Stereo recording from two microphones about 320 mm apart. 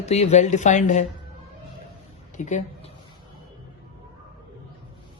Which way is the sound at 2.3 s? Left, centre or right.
Left.